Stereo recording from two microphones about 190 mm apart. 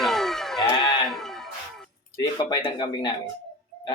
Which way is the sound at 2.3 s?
25° left (ahead or behind).